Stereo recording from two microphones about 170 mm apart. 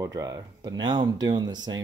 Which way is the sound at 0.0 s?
20° right (ahead or behind).